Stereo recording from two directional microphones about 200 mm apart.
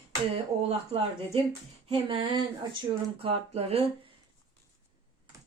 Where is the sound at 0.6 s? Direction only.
30° right (ahead or behind).